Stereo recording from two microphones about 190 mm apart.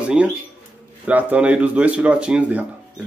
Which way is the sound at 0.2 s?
5° right (ahead or behind).